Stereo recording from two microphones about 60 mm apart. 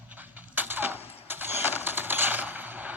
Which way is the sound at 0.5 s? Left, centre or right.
Right.